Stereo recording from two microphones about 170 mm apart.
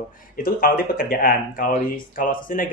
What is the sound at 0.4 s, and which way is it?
Speech, 60° left (ahead or behind).